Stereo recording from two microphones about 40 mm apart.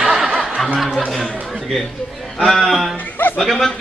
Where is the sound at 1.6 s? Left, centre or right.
Centre.